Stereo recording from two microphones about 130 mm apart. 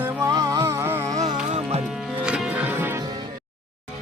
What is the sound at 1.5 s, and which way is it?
Music, 60° right (ahead or behind).